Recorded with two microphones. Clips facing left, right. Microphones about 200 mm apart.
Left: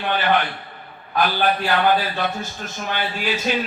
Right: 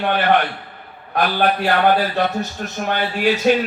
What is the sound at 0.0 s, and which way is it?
Speech, 60° right (ahead or behind).